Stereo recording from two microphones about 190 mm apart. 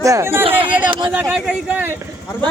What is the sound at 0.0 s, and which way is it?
Speech, 15° right (ahead or behind).